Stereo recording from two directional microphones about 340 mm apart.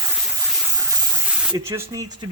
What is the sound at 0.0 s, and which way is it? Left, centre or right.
Spray, centre.